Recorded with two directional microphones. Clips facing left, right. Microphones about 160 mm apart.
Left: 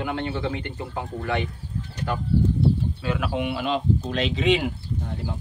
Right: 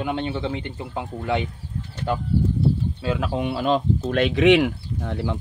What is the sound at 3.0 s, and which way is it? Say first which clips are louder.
Speech: right 2 dB; 30° right (ahead or behind).